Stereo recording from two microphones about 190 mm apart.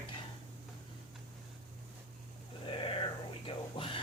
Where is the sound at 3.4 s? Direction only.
30° left (ahead or behind).